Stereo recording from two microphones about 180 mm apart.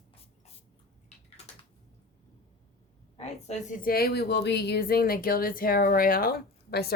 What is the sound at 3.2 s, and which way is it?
A woman's voice, 40° left (ahead or behind).